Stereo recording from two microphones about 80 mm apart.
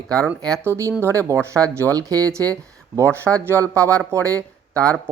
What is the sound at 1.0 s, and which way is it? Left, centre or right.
Speech, right.